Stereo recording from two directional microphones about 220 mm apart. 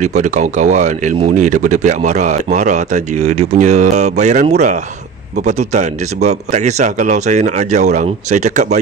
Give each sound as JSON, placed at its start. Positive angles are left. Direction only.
{"t": 0.0, "sound": "speech", "side_deg": -35}